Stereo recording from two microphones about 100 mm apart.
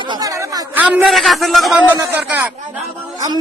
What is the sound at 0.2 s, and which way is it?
Chatter, 35° right (ahead or behind).